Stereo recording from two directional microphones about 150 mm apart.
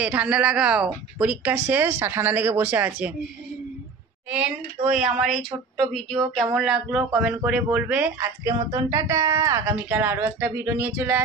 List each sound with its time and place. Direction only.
0.0 s speech: 10° right (ahead or behind)
4.3 s speech: 5° right (ahead or behind)
8.5 s speech: 20° right (ahead or behind)